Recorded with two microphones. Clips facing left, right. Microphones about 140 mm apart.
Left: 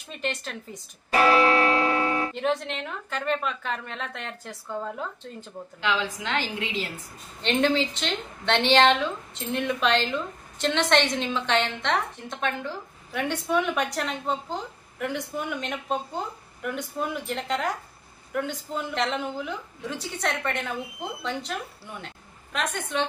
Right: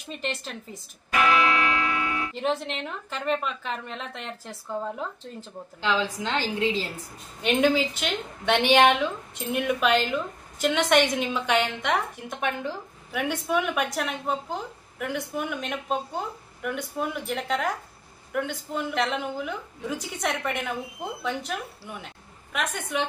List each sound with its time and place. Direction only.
1.1 s music: 35° left (ahead or behind)
2.3 s a woman's voice: centre (ahead or behind)
5.4 s a woman's voice: 35° right (ahead or behind)
7.4 s a woman's voice: 10° right (ahead or behind)